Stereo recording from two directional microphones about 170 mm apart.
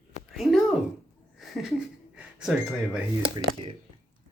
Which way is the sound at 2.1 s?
5° right (ahead or behind).